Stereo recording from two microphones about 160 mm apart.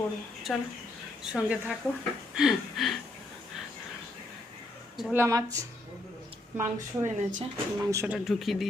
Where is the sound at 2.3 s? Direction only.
5° right (ahead or behind).